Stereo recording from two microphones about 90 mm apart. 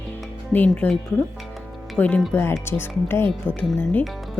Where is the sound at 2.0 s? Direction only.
15° left (ahead or behind).